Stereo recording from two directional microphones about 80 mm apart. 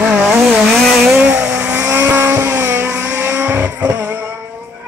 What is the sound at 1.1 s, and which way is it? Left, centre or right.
Vehicle, centre.